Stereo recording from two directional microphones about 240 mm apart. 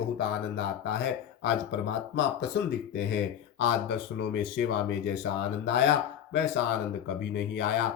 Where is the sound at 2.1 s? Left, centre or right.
Left.